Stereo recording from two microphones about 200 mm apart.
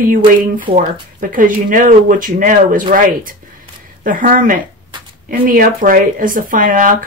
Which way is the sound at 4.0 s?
45° right (ahead or behind).